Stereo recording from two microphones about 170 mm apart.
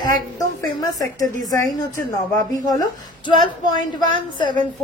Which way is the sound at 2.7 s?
25° left (ahead or behind).